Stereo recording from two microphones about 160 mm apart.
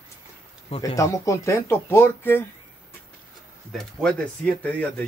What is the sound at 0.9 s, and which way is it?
Speech, 20° left (ahead or behind).